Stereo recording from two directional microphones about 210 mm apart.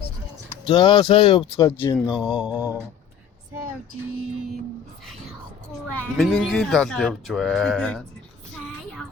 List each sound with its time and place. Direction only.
0.7 s speech: 20° left (ahead or behind)
2.0 s speech: 5° right (ahead or behind)
2.4 s mantra: 5° right (ahead or behind)
6.1 s speech: centre (ahead or behind)